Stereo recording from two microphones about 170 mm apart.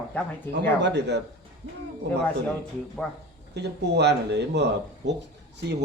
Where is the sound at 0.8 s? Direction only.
85° right.